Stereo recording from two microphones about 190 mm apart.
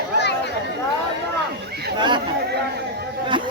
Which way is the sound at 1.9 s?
25° right (ahead or behind).